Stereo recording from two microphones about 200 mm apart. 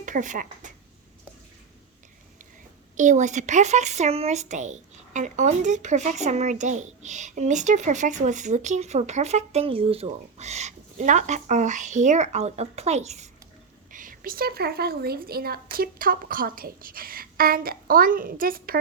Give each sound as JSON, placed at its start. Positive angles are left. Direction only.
{"t": 0.0, "sound": "speech", "side_deg": -40}
{"t": 3.0, "sound": "speech", "side_deg": -40}